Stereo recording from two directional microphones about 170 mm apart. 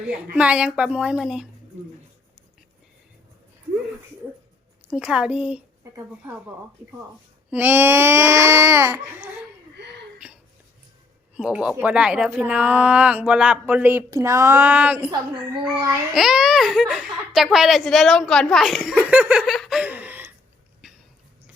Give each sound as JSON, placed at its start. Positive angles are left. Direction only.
{"t": 0.3, "sound": "speech", "side_deg": -5}
{"t": 4.9, "sound": "a woman's voice", "side_deg": -5}
{"t": 7.5, "sound": "speech", "side_deg": -10}
{"t": 9.8, "sound": "a sound", "side_deg": -90}
{"t": 11.3, "sound": "speech", "side_deg": -5}
{"t": 16.1, "sound": "speech", "side_deg": 0}